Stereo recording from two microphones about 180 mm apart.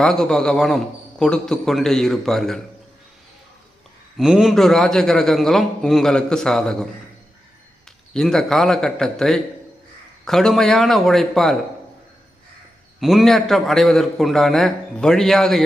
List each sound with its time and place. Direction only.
0.0 s a man's voice: 5° left (ahead or behind)
4.2 s a man's voice: centre (ahead or behind)
8.1 s a man's voice: 5° left (ahead or behind)
13.0 s a man's voice: centre (ahead or behind)